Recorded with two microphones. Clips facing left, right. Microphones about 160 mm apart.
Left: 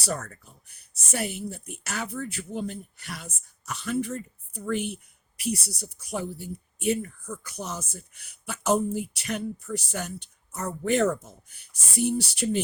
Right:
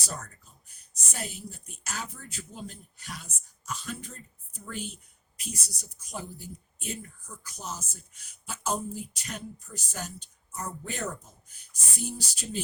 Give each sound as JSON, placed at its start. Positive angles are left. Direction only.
{"t": 0.0, "sound": "speech", "side_deg": 70}